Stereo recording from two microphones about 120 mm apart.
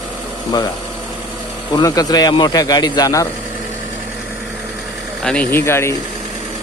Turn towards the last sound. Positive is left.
turn(degrees=20)  # may be behind; listen again after turning